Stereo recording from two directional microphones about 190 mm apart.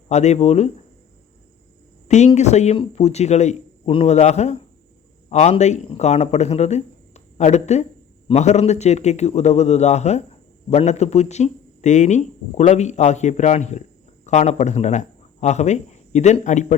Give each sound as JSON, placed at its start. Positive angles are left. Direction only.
{"t": 0.1, "sound": "speech", "side_deg": 35}
{"t": 2.0, "sound": "speech", "side_deg": 35}